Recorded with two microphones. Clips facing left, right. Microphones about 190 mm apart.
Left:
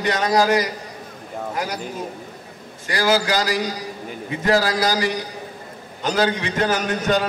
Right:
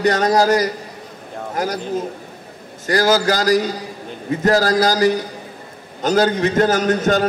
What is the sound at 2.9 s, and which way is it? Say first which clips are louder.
A man's voice: right 4 dB; 45° right (ahead or behind).